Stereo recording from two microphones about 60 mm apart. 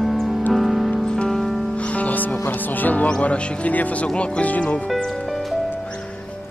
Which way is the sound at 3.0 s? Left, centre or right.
Centre.